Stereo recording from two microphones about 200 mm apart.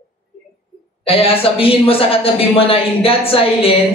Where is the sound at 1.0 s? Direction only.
30° left (ahead or behind).